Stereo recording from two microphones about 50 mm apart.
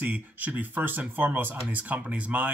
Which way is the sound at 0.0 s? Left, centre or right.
Right.